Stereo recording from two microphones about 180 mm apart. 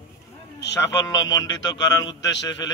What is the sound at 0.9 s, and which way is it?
A man's voice, 20° left (ahead or behind).